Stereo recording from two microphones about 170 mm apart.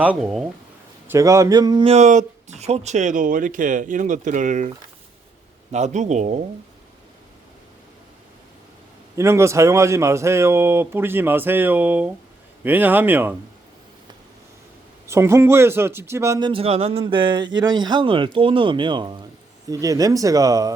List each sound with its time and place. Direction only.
0.0 s speech: 5° right (ahead or behind)
1.0 s speech: 15° right (ahead or behind)
1.9 s speech: 45° right (ahead or behind)
5.7 s speech: 45° right (ahead or behind)
9.1 s speech: 15° right (ahead or behind)
15.0 s speech: 15° right (ahead or behind)
16.5 s speech: 35° right (ahead or behind)